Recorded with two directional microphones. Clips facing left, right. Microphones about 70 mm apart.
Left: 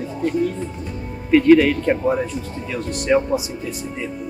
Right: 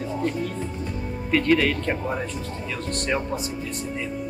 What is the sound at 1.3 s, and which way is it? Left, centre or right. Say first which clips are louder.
Speech: left 8 dB; centre.